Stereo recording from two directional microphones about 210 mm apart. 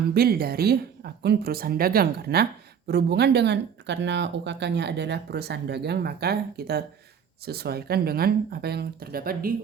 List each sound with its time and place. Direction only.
0.1 s speech: 45° right (ahead or behind)